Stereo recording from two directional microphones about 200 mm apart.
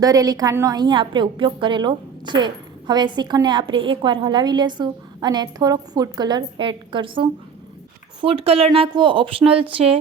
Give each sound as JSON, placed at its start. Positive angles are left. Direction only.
{"t": 0.0, "sound": "a woman's voice", "side_deg": -15}